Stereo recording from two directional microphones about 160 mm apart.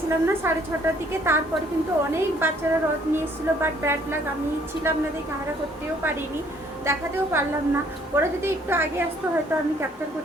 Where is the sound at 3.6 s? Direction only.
15° right (ahead or behind).